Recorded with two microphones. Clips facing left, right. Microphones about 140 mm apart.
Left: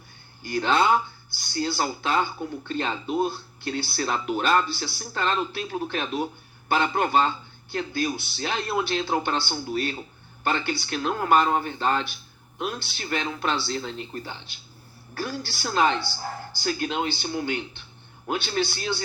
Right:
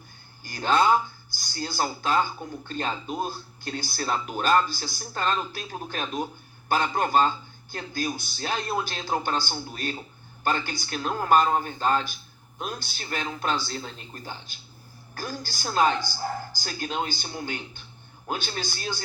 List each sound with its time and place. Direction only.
0.4 s speech: 40° right (ahead or behind)